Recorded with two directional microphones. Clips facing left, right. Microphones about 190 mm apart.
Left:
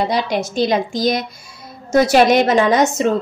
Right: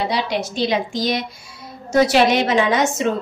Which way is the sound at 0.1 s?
45° left (ahead or behind).